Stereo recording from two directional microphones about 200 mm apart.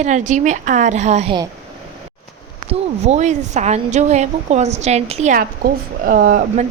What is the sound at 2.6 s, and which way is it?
A woman's voice, 35° right (ahead or behind).